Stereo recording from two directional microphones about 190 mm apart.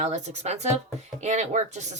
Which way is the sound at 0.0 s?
35° right (ahead or behind).